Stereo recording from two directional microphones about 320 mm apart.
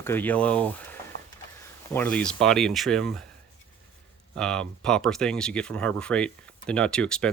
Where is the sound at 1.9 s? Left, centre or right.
Centre.